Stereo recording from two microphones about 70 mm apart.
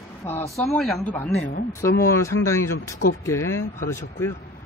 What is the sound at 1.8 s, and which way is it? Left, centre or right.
Speech, left.